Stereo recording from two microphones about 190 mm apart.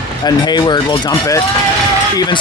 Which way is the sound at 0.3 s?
20° left (ahead or behind).